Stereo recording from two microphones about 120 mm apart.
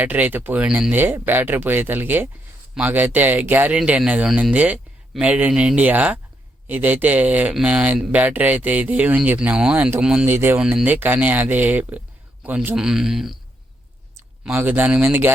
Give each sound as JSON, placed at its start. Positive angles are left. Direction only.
{"t": 0.0, "sound": "speech", "side_deg": -15}
{"t": 10.2, "sound": "speech", "side_deg": -20}
{"t": 14.4, "sound": "speech", "side_deg": -15}